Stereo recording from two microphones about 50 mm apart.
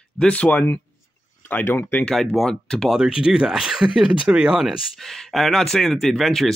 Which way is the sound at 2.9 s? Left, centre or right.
Centre.